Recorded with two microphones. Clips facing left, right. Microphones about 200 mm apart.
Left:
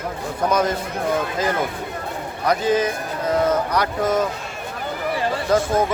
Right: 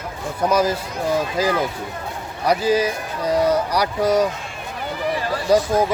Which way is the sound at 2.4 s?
10° right (ahead or behind).